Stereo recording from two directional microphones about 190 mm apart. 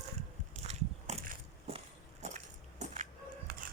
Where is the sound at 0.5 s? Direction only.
35° right (ahead or behind).